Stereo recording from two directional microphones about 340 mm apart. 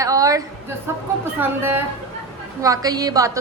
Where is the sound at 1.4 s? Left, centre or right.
Centre.